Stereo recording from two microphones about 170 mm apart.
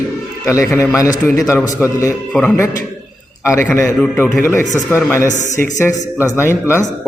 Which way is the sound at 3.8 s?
15° left (ahead or behind).